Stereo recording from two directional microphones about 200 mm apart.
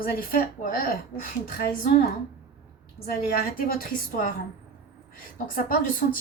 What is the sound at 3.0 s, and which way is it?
A woman's voice, 45° left (ahead or behind).